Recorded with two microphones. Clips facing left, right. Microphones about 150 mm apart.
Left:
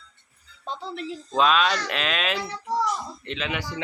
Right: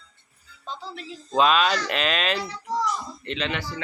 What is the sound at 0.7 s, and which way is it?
Speech, 60° left (ahead or behind).